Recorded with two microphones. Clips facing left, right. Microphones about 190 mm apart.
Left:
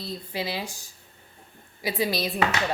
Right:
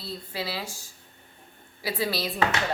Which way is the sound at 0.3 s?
20° left (ahead or behind).